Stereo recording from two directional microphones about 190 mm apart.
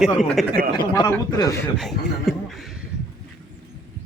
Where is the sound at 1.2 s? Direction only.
20° left (ahead or behind).